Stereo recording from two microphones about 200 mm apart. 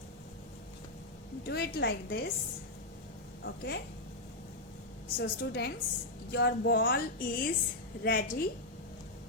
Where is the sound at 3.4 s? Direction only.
55° left (ahead or behind).